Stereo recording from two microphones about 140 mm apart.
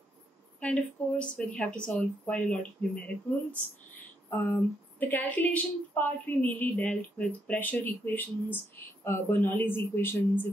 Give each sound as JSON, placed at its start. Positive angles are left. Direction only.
{"t": 0.6, "sound": "a woman's voice", "side_deg": 10}
{"t": 4.3, "sound": "a woman's voice", "side_deg": 15}